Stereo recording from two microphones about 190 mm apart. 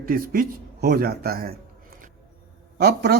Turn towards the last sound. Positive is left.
turn(degrees=-55)  # may be behind; listen again after turning